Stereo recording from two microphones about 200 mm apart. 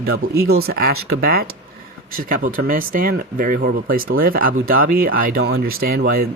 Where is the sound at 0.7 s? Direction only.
50° right (ahead or behind).